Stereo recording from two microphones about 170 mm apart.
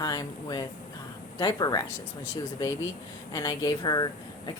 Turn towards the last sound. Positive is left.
turn(degrees=25)  # may be behind; listen again after turning